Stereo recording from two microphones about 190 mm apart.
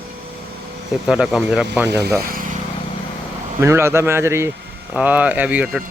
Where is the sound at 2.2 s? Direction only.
50° right (ahead or behind).